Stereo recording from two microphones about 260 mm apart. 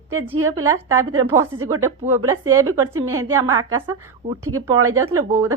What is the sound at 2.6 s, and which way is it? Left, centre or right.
Speech, right.